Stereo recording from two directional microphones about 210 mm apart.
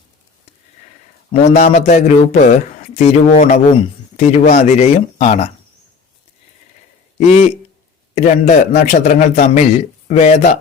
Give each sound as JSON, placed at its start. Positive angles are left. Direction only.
{"t": 1.3, "sound": "a man's voice", "side_deg": 30}
{"t": 8.1, "sound": "a man's voice", "side_deg": 30}